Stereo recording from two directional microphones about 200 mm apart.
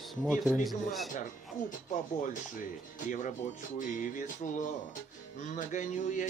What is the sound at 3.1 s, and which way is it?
Speech, 40° left (ahead or behind).